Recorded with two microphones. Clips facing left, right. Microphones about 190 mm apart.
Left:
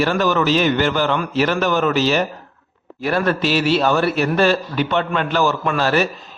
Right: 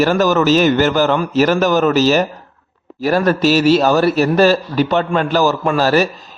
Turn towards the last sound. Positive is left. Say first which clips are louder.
# right 4 dB
turn(degrees=-40)  # may be behind; listen again after turning